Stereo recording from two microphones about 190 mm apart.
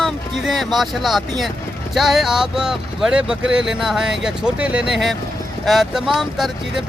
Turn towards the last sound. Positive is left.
turn(degrees=0)  # may be behind; listen again after turning